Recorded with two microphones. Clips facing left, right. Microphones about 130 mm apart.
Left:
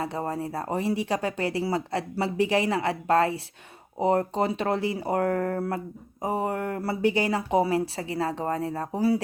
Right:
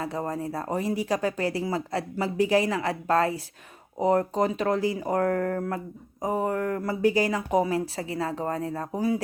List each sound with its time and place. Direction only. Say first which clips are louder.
0.0 s speech: even; 30° left (ahead or behind)